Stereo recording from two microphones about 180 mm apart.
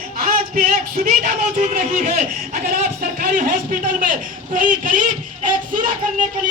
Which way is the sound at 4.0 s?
50° right (ahead or behind).